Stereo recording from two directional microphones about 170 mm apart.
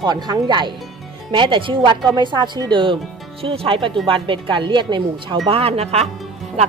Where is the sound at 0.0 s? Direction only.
25° right (ahead or behind).